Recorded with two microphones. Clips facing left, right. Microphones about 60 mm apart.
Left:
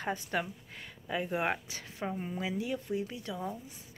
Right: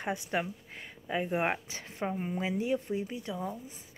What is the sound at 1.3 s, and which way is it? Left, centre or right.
A woman's voice, right.